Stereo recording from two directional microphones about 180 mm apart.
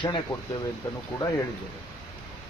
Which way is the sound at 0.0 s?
25° left (ahead or behind).